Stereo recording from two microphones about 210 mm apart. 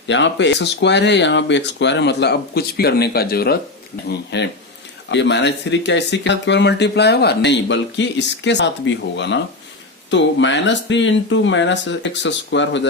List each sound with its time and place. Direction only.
0.1 s speech: 60° left (ahead or behind)